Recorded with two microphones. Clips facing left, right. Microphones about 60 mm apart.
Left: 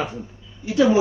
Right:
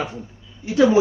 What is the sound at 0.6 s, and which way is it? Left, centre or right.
Speech, right.